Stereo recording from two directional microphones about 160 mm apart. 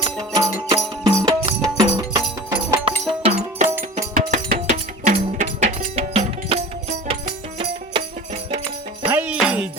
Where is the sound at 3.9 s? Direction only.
55° right (ahead or behind); by 8.0 s 40° right (ahead or behind).